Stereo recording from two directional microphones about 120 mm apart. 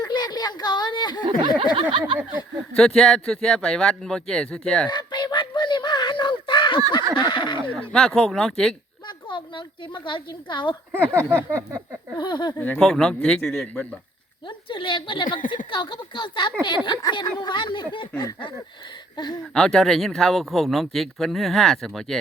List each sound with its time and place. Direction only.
0.0 s a woman's voice: 35° left (ahead or behind)
1.7 s a sound: 45° right (ahead or behind)
2.7 s speech: 5° left (ahead or behind)
4.9 s a sound: 40° left (ahead or behind)
7.2 s speech: 40° left (ahead or behind)
7.7 s speech: 5° left (ahead or behind)
9.0 s a woman's voice: 45° left (ahead or behind)
10.9 s a sound: 20° right (ahead or behind)
12.1 s speech: 40° left (ahead or behind)
12.5 s speech: 15° left (ahead or behind)
14.4 s a woman's voice: 45° left (ahead or behind)
19.1 s speech: 35° left (ahead or behind)
19.5 s speech: 5° left (ahead or behind)